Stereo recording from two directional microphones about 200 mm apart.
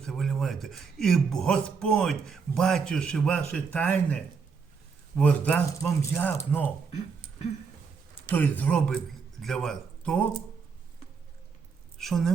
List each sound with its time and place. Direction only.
0.0 s a man's voice: centre (ahead or behind)
8.3 s speech: 10° left (ahead or behind)
11.9 s a woman's voice: centre (ahead or behind)